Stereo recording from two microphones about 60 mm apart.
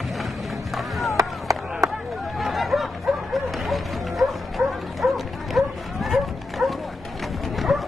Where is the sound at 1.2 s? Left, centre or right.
Right.